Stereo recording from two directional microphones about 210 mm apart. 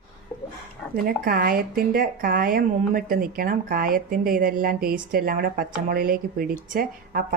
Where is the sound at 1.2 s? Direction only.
45° right (ahead or behind).